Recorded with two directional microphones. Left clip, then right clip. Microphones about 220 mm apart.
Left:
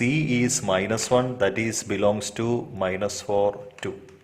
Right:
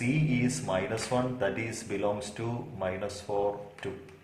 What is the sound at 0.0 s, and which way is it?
Speech, 50° left (ahead or behind).